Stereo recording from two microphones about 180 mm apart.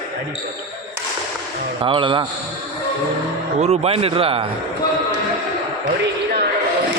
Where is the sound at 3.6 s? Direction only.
35° right (ahead or behind).